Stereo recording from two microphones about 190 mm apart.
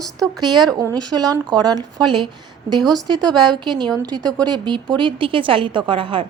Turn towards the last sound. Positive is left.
turn(degrees=-25)  # may be behind; listen again after turning